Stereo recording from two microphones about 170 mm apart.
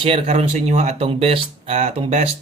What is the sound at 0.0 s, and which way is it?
Speech, 35° right (ahead or behind).